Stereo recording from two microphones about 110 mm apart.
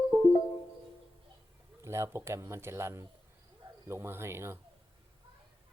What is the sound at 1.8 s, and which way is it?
A man's voice, 25° right (ahead or behind).